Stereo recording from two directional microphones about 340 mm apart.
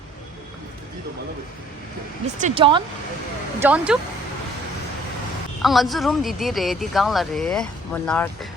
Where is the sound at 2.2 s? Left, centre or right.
Centre.